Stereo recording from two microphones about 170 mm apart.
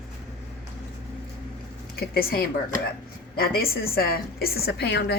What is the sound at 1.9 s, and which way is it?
A woman's voice, 65° left (ahead or behind).